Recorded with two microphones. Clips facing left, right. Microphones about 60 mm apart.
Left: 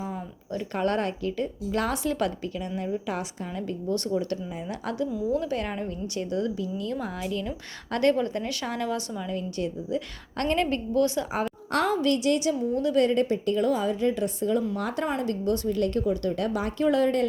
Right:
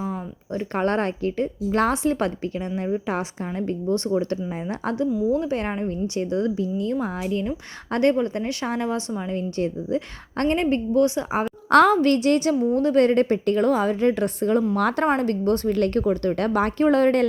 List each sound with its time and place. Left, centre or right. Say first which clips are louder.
0.0 s a woman's voice: right 5 dB; right
11.7 s a woman's voice: right 9 dB; right
14.8 s a woman's voice: right 8 dB; right
15.0 s a woman's voice: right 6 dB; right